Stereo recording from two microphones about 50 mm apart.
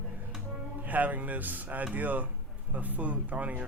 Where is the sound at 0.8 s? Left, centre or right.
Right.